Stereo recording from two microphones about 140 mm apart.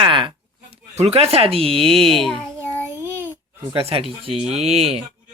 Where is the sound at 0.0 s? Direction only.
35° right (ahead or behind).